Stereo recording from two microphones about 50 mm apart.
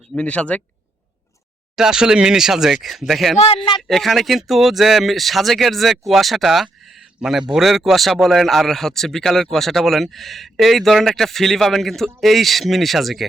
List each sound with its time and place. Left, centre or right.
0.2 s speech: left
1.7 s speech: centre